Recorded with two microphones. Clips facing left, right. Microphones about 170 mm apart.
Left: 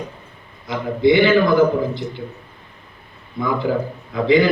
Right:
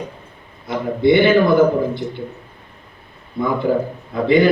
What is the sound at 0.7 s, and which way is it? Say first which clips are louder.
Speech: right 1 dB; 55° right (ahead or behind).